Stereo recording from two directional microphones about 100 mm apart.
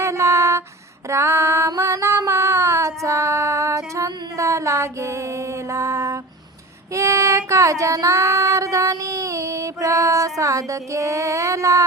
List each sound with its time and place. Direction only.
0.0 s a sound: 30° right (ahead or behind)
1.0 s female singing: 25° right (ahead or behind)
6.9 s child singing: 30° right (ahead or behind)